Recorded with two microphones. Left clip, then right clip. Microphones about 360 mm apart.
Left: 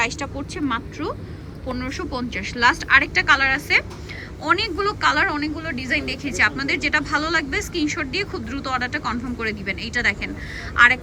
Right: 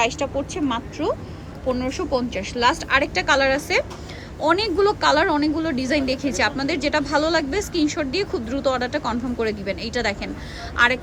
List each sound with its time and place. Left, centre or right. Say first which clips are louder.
0.0 s a woman's voice: right 3 dB; centre